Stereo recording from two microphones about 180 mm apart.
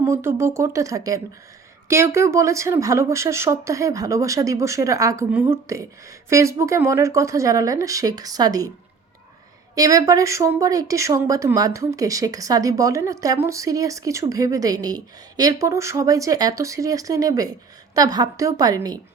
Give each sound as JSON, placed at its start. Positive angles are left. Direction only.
{"t": 0.0, "sound": "speech", "side_deg": -15}
{"t": 9.7, "sound": "speech", "side_deg": -20}